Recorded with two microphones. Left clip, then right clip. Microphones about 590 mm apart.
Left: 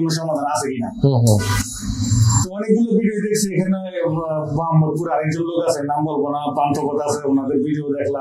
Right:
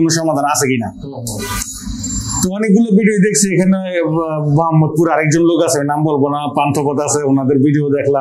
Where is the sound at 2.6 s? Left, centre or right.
Right.